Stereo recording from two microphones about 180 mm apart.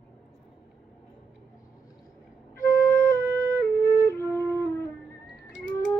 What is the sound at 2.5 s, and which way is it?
Flute, 15° left (ahead or behind).